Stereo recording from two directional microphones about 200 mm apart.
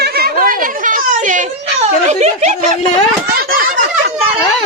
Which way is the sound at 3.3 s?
45° right (ahead or behind).